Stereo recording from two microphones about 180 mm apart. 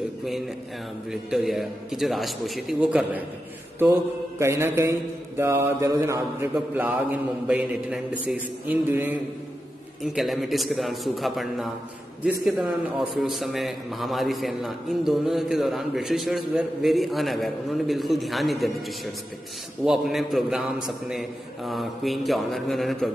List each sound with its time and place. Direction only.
1.1 s a man's voice: centre (ahead or behind)